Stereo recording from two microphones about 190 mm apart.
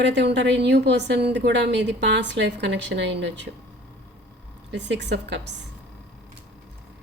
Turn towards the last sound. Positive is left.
turn(degrees=-65)  # may be behind; listen again after turning